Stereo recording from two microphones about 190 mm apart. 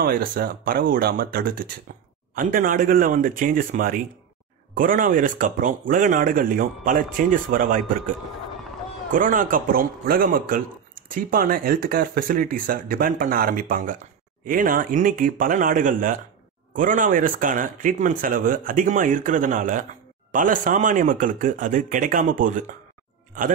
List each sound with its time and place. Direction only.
0.0 s speech: 50° right (ahead or behind)
9.1 s speech: 45° right (ahead or behind)